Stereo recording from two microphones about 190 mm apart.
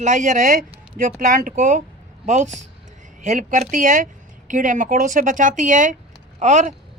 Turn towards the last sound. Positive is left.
turn(degrees=-40)  # may be behind; listen again after turning